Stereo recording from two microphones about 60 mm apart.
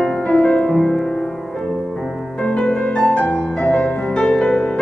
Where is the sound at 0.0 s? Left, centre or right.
Centre.